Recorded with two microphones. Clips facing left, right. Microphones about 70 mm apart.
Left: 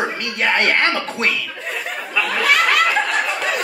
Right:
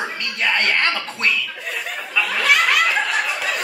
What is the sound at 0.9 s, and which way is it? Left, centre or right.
Speech, left.